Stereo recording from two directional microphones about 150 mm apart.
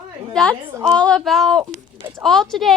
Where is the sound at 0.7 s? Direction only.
20° right (ahead or behind).